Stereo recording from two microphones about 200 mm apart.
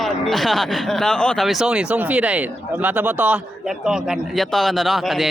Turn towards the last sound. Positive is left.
turn(degrees=0)  # may be behind; listen again after turning